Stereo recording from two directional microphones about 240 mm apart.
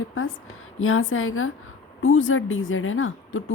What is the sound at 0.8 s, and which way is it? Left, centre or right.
A woman's voice, left.